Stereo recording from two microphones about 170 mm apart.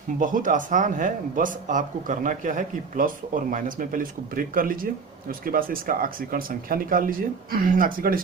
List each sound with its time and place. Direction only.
0.2 s speech: 50° right (ahead or behind)